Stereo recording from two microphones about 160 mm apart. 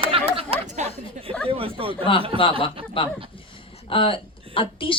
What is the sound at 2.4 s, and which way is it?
Speech, 35° left (ahead or behind).